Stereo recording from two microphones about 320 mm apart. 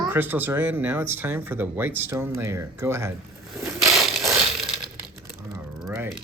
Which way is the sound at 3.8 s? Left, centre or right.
Centre.